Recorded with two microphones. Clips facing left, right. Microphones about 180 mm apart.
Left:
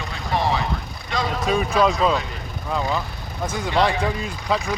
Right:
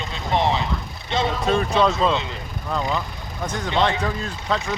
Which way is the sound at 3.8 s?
10° left (ahead or behind).